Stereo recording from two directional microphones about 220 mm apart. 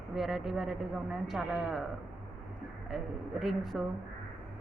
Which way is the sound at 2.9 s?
Centre (ahead or behind).